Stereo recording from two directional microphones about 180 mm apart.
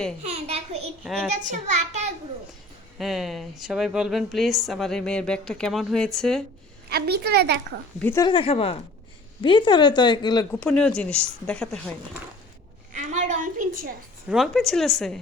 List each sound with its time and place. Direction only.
0.2 s a sound: 40° right (ahead or behind)
1.0 s speech: centre (ahead or behind)
1.3 s a child's voice: 40° right (ahead or behind)
3.0 s speech: centre (ahead or behind)
6.9 s a woman's voice: 65° right (ahead or behind)
8.0 s speech: 15° left (ahead or behind)
8.3 s speech: 30° left (ahead or behind)
10.5 s speech: 5° left (ahead or behind)
12.9 s a sound: 40° right (ahead or behind)
14.3 s speech: centre (ahead or behind)